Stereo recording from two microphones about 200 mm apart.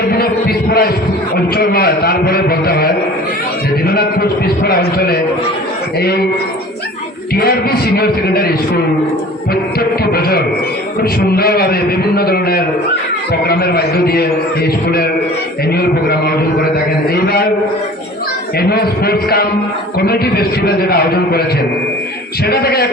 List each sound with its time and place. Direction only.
0.1 s a sound: 50° left (ahead or behind)
1.5 s a man's voice: 50° left (ahead or behind)
7.3 s a man's voice: 50° left (ahead or behind)
10.0 s a man's voice: 50° left (ahead or behind)
18.7 s a man's voice: 50° left (ahead or behind)
22.4 s a man's voice: 50° left (ahead or behind)